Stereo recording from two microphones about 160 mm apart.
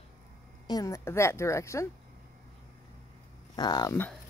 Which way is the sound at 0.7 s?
20° left (ahead or behind).